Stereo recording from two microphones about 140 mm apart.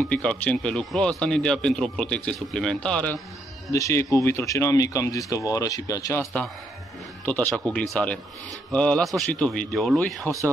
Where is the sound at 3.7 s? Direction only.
25° left (ahead or behind); by 10.2 s centre (ahead or behind).